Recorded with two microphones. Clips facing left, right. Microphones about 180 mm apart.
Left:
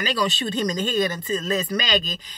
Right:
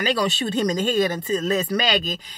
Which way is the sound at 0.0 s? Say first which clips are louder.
Right 2 dB; 55° right (ahead or behind).